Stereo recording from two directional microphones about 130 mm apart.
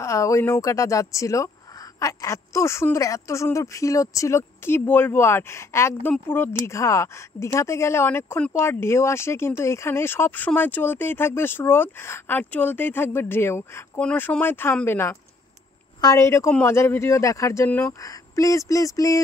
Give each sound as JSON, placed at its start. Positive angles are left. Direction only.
{"t": 0.0, "sound": "speech", "side_deg": 25}
{"t": 18.0, "sound": "speech", "side_deg": 25}